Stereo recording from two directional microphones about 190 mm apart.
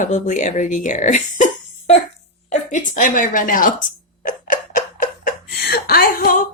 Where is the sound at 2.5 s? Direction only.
40° left (ahead or behind).